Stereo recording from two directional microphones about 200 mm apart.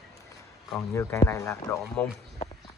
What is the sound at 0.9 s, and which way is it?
Speech, 15° left (ahead or behind).